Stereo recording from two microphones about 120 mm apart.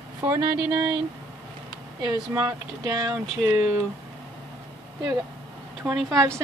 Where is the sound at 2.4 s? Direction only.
30° right (ahead or behind).